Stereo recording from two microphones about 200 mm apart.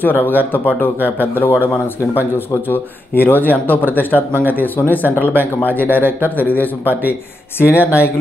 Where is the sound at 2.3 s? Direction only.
10° left (ahead or behind).